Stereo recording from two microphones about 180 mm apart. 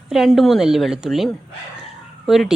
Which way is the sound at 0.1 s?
Centre (ahead or behind).